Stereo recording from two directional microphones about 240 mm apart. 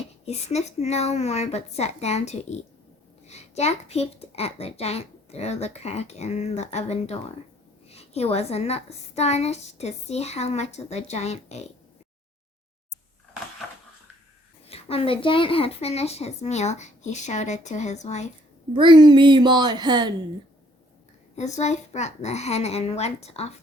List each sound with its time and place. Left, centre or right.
0.3 s a woman's voice: left
14.7 s a woman's voice: left
18.7 s a woman's voice: centre
21.3 s a woman's voice: left